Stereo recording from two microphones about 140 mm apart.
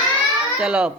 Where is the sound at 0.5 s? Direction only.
5° right (ahead or behind).